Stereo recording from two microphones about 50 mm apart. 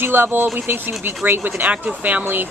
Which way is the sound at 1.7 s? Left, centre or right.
Right.